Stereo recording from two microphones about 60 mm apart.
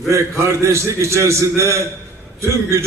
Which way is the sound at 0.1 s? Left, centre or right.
Right.